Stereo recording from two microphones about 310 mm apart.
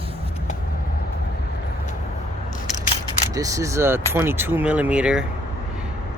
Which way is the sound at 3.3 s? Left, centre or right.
Centre.